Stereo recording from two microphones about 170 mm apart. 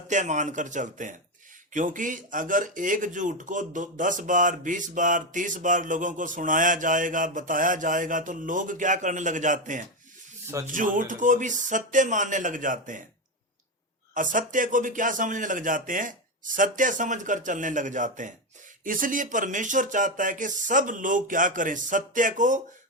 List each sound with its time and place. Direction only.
0.1 s speech: 45° right (ahead or behind)
14.1 s speech: 50° right (ahead or behind)